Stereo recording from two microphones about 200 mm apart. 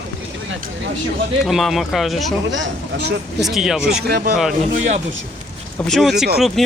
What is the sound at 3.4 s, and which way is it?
Speech, centre (ahead or behind).